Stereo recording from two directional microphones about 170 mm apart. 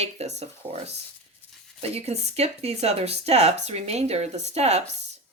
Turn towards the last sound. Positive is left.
turn(degrees=-40)  # may be behind; listen again after turning